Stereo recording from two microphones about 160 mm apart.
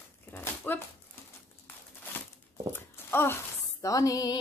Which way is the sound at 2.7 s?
15° left (ahead or behind).